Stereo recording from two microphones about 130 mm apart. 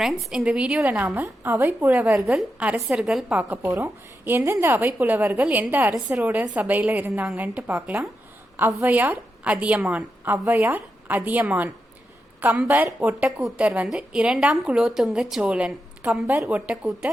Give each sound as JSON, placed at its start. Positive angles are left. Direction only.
{"t": 0.0, "sound": "a woman's voice", "side_deg": -5}